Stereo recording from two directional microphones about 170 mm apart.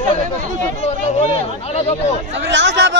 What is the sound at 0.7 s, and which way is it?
Speech, 35° left (ahead or behind).